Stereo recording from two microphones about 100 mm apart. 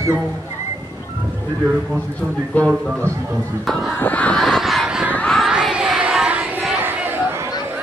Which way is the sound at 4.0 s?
15° left (ahead or behind).